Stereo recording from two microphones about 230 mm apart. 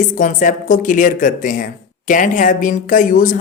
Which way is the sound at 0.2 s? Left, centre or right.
Left.